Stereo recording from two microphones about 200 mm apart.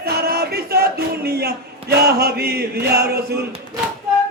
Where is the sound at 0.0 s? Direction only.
50° right (ahead or behind).